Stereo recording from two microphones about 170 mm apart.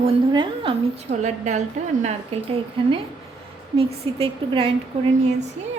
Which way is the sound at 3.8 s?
35° right (ahead or behind).